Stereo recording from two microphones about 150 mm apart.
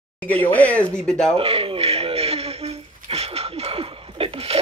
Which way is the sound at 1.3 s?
40° right (ahead or behind).